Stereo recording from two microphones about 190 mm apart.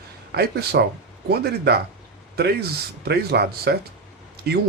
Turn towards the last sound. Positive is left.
turn(degrees=-55)  # may be behind; listen again after turning